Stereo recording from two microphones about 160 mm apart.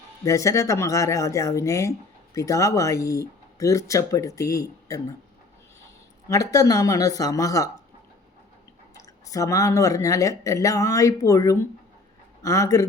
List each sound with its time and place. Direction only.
0.3 s speech: 20° left (ahead or behind)
6.2 s speech: 20° left (ahead or behind)
9.0 s speech: 20° left (ahead or behind)